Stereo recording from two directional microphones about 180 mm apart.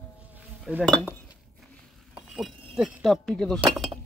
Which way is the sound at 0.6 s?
Centre (ahead or behind).